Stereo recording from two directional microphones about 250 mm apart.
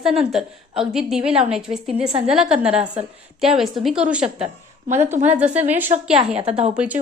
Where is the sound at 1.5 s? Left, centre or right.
Centre.